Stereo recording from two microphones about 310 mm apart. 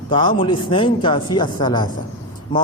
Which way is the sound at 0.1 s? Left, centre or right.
Centre.